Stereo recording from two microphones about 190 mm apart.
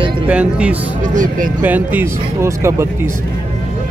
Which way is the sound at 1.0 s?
45° right (ahead or behind).